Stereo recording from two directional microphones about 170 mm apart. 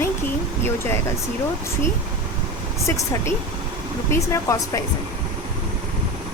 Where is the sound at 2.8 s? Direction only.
20° left (ahead or behind).